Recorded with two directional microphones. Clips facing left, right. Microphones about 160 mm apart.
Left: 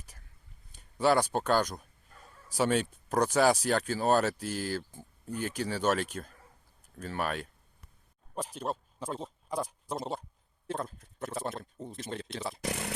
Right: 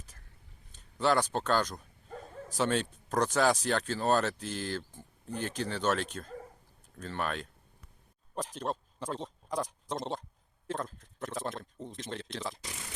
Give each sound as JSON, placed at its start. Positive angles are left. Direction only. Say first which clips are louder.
{"t": 0.7, "sound": "speech", "louder": "left 2 dB", "side_deg": 10}
{"t": 2.0, "sound": "bow-wow", "louder": "right 13 dB", "side_deg": -90}
{"t": 2.5, "sound": "speech", "louder": "left 2 dB", "side_deg": 10}
{"t": 12.6, "sound": "speech", "louder": "left 11 dB", "side_deg": 70}